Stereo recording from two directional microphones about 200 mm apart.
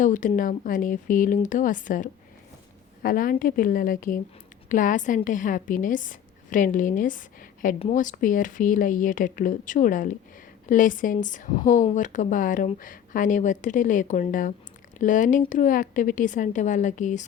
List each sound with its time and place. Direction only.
0.0 s a woman's voice: 40° left (ahead or behind)